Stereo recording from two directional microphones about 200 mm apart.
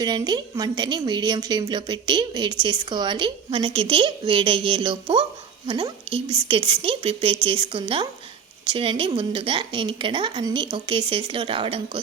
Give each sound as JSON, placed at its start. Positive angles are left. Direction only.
{"t": 0.0, "sound": "a woman's voice", "side_deg": -20}